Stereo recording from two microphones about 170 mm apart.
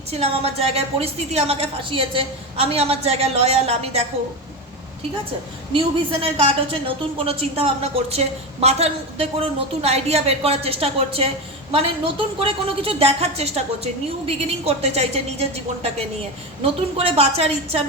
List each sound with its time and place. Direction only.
0.1 s a woman's voice: 35° right (ahead or behind)
5.7 s a woman's voice: 35° right (ahead or behind)
12.4 s a woman's voice: 35° right (ahead or behind)